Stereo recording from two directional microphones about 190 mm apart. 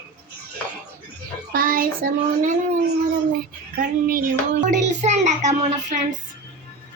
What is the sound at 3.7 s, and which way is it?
Speech, 50° right (ahead or behind).